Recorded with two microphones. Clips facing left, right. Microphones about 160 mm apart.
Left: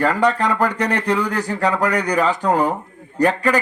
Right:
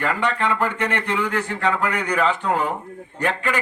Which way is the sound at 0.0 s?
35° left (ahead or behind).